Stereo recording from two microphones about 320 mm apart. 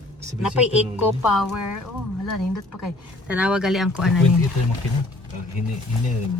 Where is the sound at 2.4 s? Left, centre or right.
Left.